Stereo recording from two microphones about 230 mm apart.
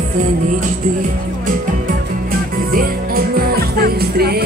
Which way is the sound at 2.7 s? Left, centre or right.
Right.